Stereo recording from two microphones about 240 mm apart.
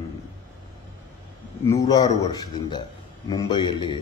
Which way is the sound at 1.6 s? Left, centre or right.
Centre.